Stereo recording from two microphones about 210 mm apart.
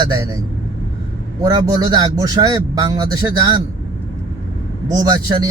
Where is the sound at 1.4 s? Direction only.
20° right (ahead or behind).